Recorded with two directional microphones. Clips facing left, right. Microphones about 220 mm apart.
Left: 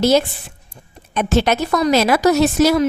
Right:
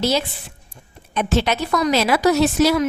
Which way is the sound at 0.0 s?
50° left (ahead or behind).